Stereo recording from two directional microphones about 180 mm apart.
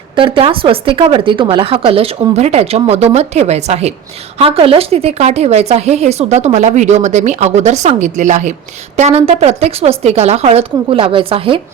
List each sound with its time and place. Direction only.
0.2 s speech: 30° right (ahead or behind)